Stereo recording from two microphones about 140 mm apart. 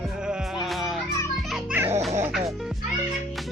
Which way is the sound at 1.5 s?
10° right (ahead or behind).